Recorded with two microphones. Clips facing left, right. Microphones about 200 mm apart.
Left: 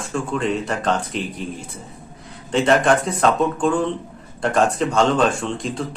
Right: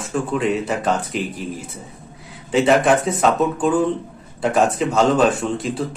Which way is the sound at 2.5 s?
5° right (ahead or behind).